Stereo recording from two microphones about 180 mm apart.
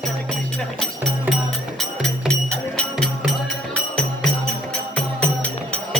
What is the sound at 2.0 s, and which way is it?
Music, 5° left (ahead or behind).